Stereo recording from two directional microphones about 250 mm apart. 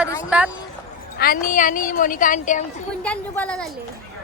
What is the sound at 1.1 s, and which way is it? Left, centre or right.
A woman's voice, left.